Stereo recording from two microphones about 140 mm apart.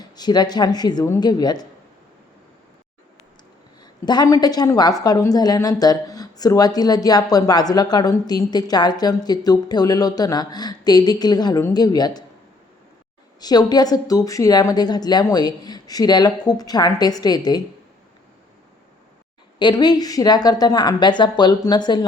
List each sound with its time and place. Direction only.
0.0 s a woman's voice: 30° left (ahead or behind)
4.0 s a woman's voice: 30° left (ahead or behind)
13.4 s a woman's voice: 30° left (ahead or behind)
19.5 s speech: 30° left (ahead or behind)